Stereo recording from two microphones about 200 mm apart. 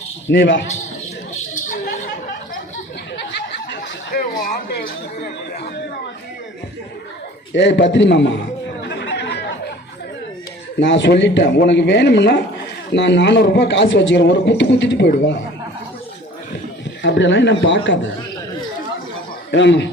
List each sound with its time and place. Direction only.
0.3 s a man's voice: 65° left (ahead or behind)
1.6 s a sound: 45° left (ahead or behind)
4.1 s a sound: 50° left (ahead or behind)
7.5 s a man's voice: 60° left (ahead or behind)
8.9 s chatter: 60° left (ahead or behind)
10.8 s a man's voice: 65° left (ahead or behind)
17.0 s a man's voice: 65° left (ahead or behind)
19.5 s a man's voice: 60° left (ahead or behind)